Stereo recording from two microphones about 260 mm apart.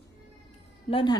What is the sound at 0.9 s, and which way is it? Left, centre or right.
Speech, centre.